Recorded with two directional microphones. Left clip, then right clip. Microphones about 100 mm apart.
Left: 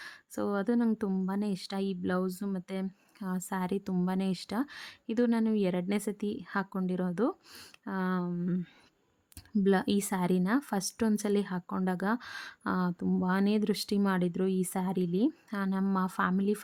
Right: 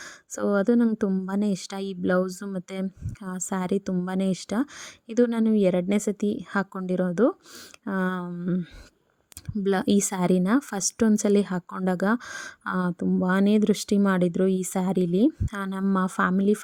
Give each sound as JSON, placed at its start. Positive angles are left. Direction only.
{"t": 0.0, "sound": "a sound", "side_deg": -55}
{"t": 1.3, "sound": "speech", "side_deg": -60}
{"t": 5.6, "sound": "speech", "side_deg": -55}
{"t": 8.3, "sound": "speech", "side_deg": -45}
{"t": 9.6, "sound": "speech", "side_deg": -60}